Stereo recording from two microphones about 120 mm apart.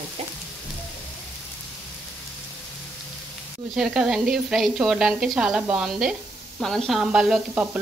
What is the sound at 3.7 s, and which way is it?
A woman's voice, 5° right (ahead or behind).